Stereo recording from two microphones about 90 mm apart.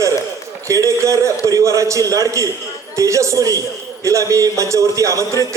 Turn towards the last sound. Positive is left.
turn(degrees=-35)  # may be behind; listen again after turning